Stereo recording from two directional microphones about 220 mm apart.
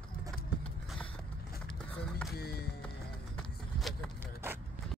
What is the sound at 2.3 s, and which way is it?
Music, 45° left (ahead or behind).